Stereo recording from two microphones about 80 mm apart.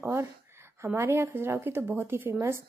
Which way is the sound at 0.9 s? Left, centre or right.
Right.